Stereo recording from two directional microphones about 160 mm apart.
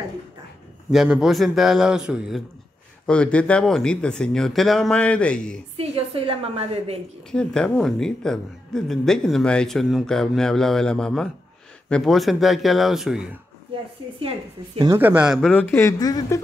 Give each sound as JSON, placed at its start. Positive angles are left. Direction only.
{"t": 0.9, "sound": "speech", "side_deg": -5}
{"t": 3.1, "sound": "speech", "side_deg": 5}
{"t": 5.8, "sound": "a woman's voice", "side_deg": -35}
{"t": 7.2, "sound": "speech", "side_deg": 5}
{"t": 15.0, "sound": "speech", "side_deg": -10}
{"t": 15.5, "sound": "speech", "side_deg": 15}